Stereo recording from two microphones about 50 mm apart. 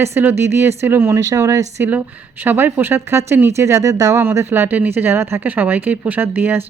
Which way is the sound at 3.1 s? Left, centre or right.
Right.